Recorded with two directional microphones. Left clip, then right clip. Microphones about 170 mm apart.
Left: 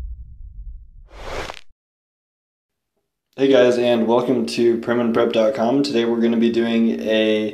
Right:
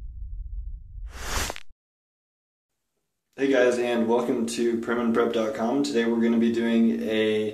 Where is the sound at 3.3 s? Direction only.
30° left (ahead or behind).